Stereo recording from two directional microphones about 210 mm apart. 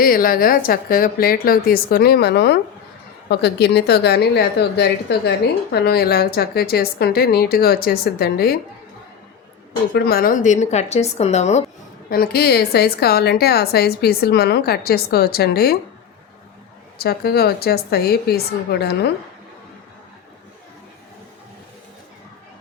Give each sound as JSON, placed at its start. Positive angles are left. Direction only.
{"t": 0.0, "sound": "a woman's voice", "side_deg": 45}
{"t": 9.9, "sound": "speech", "side_deg": 45}
{"t": 12.1, "sound": "a woman's voice", "side_deg": 50}
{"t": 17.0, "sound": "a woman's voice", "side_deg": 50}